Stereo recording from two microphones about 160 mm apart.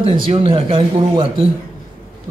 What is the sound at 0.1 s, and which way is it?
Speech, 35° right (ahead or behind).